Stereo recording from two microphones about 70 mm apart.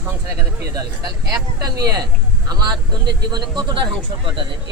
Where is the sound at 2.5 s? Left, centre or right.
Right.